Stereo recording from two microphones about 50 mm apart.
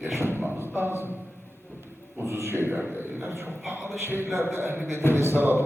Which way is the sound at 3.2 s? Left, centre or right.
Right.